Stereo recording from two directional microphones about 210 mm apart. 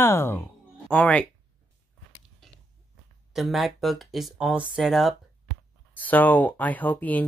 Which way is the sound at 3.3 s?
Centre (ahead or behind).